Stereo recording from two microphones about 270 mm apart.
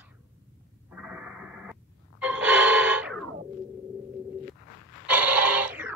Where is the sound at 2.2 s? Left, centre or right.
Centre.